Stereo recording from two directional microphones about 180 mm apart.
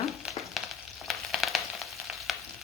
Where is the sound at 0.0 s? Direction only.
Centre (ahead or behind).